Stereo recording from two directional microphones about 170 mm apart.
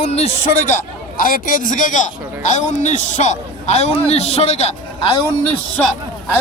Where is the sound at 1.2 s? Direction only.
55° left (ahead or behind); by 5.1 s 35° left (ahead or behind).